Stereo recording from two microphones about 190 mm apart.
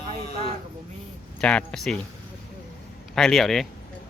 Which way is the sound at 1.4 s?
5° left (ahead or behind).